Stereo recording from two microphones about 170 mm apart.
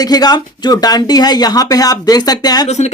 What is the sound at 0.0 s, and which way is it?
Speech, 20° left (ahead or behind).